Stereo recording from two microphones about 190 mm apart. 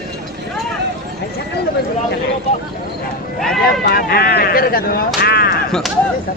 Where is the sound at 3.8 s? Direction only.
55° left (ahead or behind).